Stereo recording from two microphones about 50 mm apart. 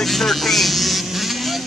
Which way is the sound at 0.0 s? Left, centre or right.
Centre.